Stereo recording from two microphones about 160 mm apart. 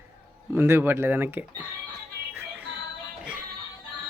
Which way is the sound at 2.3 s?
10° right (ahead or behind).